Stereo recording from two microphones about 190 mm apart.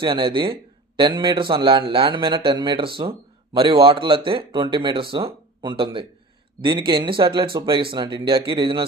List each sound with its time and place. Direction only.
0.0 s speech: 25° right (ahead or behind)